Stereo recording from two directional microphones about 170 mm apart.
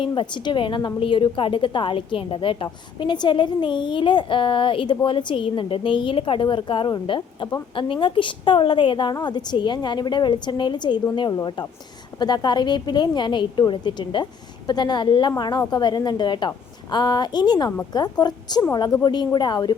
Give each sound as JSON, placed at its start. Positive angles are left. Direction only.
{"t": 0.0, "sound": "a woman's voice", "side_deg": 30}